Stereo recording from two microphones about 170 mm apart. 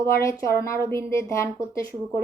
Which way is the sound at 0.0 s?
15° left (ahead or behind).